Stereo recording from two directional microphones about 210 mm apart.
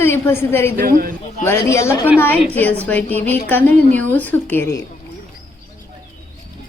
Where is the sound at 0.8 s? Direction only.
45° right (ahead or behind).